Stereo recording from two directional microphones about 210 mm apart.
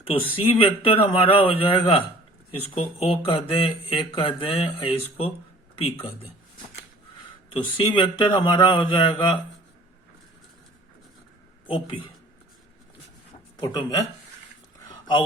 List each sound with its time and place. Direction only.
0.1 s speech: 25° left (ahead or behind)
7.5 s speech: 25° left (ahead or behind)
11.6 s a woman's voice: 25° left (ahead or behind)
13.6 s speech: 20° left (ahead or behind)